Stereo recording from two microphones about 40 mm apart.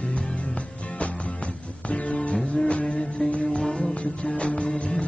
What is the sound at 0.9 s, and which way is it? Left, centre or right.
Music, left.